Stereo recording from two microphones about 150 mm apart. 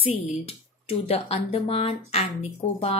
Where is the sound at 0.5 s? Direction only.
40° left (ahead or behind).